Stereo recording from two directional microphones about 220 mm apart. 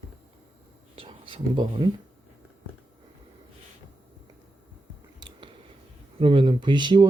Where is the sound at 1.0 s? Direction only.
25° right (ahead or behind).